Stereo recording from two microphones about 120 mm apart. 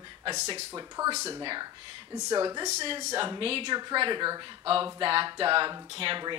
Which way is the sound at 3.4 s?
50° right (ahead or behind).